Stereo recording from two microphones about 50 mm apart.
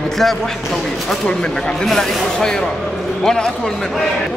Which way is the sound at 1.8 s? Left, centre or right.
Centre.